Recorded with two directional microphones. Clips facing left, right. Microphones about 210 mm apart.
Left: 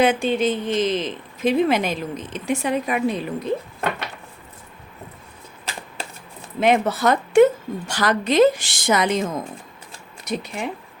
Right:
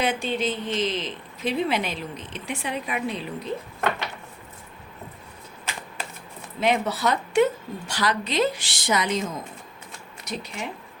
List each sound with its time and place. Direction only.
0.0 s a woman's voice: 50° left (ahead or behind)
6.6 s a woman's voice: 50° left (ahead or behind)
10.2 s a woman's voice: 55° left (ahead or behind)